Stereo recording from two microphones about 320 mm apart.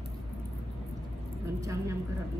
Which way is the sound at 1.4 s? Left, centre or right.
Centre.